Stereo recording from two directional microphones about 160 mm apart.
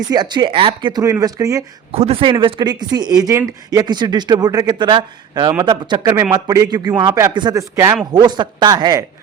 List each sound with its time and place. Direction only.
0.1 s speech: 25° right (ahead or behind)
1.9 s speech: 40° right (ahead or behind)